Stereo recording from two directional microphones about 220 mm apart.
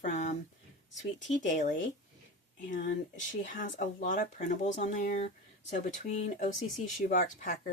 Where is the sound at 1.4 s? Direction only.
35° left (ahead or behind).